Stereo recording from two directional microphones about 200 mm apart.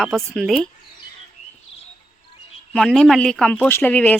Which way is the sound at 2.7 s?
5° left (ahead or behind).